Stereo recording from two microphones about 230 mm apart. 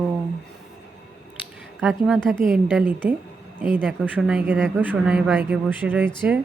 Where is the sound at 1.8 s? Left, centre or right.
Centre.